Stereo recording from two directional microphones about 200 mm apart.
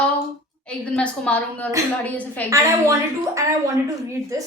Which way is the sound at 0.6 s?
5° left (ahead or behind).